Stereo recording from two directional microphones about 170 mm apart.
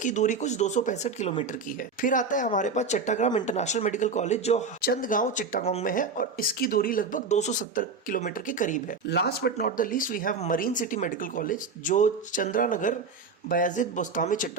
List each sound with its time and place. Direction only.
0.0 s speech: 45° left (ahead or behind)
4.8 s speech: 60° left (ahead or behind)
9.0 s speech: 75° left (ahead or behind); by 14.5 s 50° left (ahead or behind)